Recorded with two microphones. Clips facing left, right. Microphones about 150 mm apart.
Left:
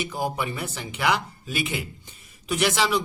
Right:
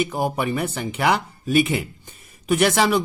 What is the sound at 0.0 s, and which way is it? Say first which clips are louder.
Speech: right 5 dB; 55° right (ahead or behind).